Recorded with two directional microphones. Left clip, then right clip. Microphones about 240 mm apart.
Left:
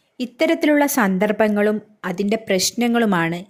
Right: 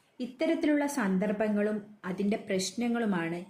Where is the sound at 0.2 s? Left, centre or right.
Left.